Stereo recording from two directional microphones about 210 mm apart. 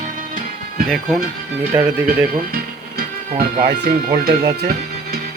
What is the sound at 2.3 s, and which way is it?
Speech, 45° right (ahead or behind).